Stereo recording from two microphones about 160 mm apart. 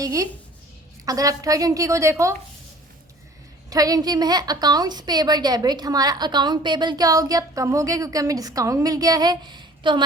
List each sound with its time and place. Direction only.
0.0 s a woman's voice: 20° right (ahead or behind)
3.7 s a woman's voice: 25° right (ahead or behind)